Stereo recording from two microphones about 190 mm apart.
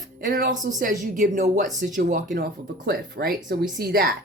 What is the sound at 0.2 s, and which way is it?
A woman's voice, 45° right (ahead or behind).